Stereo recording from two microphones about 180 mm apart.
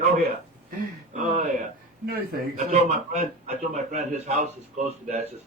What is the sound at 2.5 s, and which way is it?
Speech, 40° right (ahead or behind).